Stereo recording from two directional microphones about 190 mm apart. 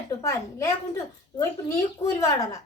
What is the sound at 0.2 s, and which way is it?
Speech, 15° left (ahead or behind).